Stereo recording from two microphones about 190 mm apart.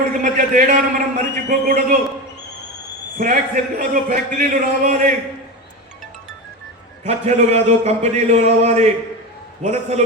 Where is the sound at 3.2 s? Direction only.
45° right (ahead or behind).